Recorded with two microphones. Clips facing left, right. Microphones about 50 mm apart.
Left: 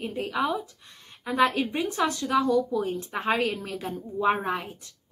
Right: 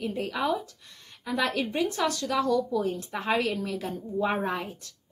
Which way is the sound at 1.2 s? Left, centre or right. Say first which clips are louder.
Left 4 dB; left.